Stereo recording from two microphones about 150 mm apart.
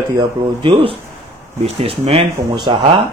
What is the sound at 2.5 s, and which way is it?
Speech, 30° right (ahead or behind).